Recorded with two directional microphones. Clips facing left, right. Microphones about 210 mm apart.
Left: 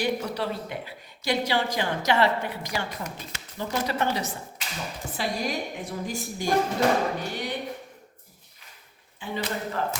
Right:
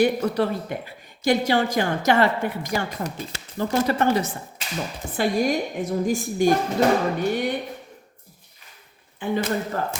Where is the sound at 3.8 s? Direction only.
50° right (ahead or behind).